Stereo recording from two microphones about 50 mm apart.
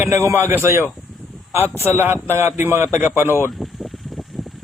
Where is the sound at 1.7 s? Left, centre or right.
Right.